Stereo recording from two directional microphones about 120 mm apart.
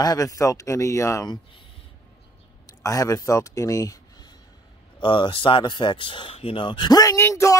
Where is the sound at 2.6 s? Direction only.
30° left (ahead or behind).